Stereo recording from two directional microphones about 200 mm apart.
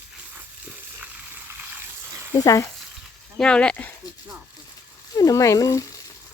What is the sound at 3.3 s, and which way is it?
Speech, 5° left (ahead or behind).